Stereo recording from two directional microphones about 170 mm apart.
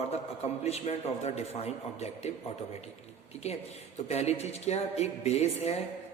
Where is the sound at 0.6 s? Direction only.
40° left (ahead or behind).